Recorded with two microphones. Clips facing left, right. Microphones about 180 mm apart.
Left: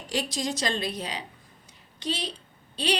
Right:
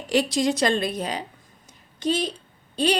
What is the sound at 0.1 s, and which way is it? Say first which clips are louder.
A woman's voice: right 8 dB; 65° right (ahead or behind).